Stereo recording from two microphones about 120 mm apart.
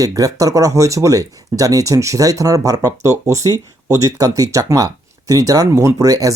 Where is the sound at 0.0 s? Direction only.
30° right (ahead or behind).